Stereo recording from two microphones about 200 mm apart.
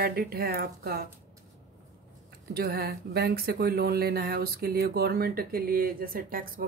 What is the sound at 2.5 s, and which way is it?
Speech, 50° right (ahead or behind).